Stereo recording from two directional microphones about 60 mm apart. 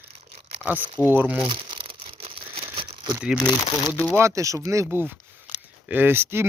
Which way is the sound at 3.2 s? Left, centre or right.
Centre.